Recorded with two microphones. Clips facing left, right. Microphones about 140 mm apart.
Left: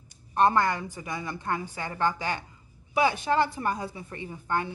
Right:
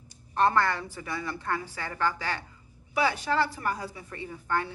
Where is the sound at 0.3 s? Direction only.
15° left (ahead or behind).